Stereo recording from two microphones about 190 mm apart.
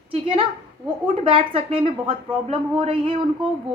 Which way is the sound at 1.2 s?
30° right (ahead or behind).